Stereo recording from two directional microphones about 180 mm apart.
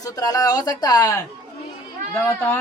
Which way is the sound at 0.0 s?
20° left (ahead or behind).